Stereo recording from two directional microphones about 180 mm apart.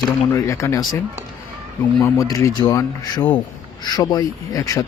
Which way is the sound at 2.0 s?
15° left (ahead or behind).